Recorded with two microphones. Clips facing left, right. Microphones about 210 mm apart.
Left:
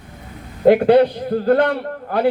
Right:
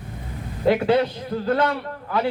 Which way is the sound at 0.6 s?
50° left (ahead or behind).